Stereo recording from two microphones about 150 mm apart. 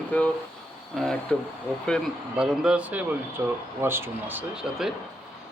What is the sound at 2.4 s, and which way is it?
Speech, 5° right (ahead or behind).